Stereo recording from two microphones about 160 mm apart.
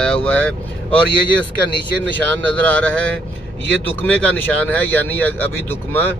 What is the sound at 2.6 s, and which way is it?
Speech, 10° left (ahead or behind).